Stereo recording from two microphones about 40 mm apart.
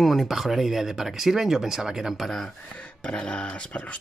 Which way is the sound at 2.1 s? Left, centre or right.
Centre.